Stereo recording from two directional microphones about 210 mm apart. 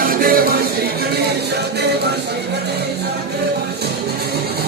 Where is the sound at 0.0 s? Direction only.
45° right (ahead or behind).